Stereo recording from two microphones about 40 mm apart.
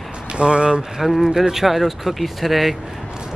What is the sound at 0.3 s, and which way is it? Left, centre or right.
Speech, right.